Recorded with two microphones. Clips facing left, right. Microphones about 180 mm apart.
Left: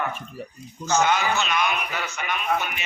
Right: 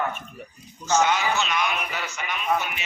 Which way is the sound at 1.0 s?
55° left (ahead or behind).